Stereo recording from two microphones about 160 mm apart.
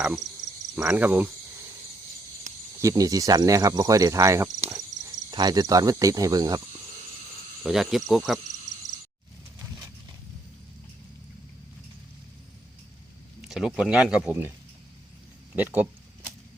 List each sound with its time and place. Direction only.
0.8 s cricket: 10° right (ahead or behind)
2.5 s snake: 50° right (ahead or behind)
2.8 s cricket: 20° right (ahead or behind)
7.6 s speech: centre (ahead or behind)
13.4 s speech: centre (ahead or behind)
15.5 s cricket: 10° right (ahead or behind)